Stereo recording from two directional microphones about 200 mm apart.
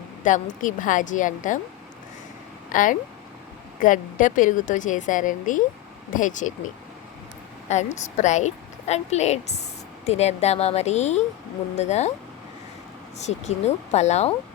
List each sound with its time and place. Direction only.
0.3 s a woman's voice: 40° left (ahead or behind)
2.6 s a woman's voice: 40° left (ahead or behind)
7.7 s a woman's voice: 35° left (ahead or behind)
13.1 s a woman's voice: 35° left (ahead or behind)